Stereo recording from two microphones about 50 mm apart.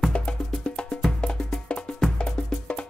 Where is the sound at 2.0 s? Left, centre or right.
Centre.